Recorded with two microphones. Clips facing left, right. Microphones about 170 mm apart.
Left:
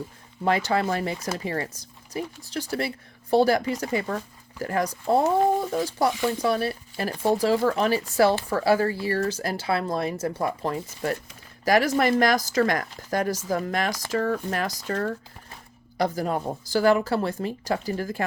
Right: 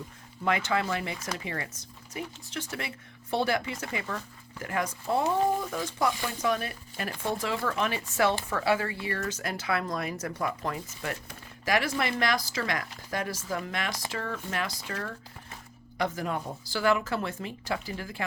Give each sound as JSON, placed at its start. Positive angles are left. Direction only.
{"t": 0.4, "sound": "speech", "side_deg": 35}